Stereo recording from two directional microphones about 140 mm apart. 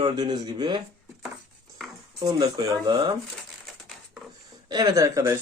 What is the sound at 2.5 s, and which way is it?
Speech, 30° right (ahead or behind).